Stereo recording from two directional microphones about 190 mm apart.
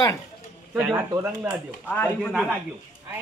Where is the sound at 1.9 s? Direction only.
10° left (ahead or behind).